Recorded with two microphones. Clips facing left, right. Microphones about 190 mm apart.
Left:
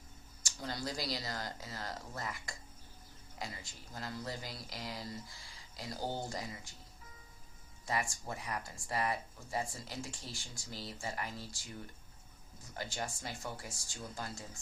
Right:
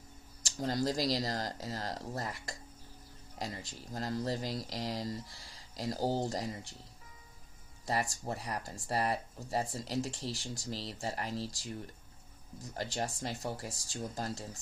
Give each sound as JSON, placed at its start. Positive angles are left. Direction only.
{"t": 0.6, "sound": "speech", "side_deg": -40}
{"t": 7.9, "sound": "speech", "side_deg": -35}
{"t": 12.6, "sound": "speech", "side_deg": -35}